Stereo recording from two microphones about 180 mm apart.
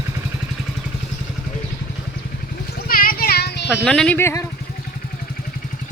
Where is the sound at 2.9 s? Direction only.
55° left (ahead or behind).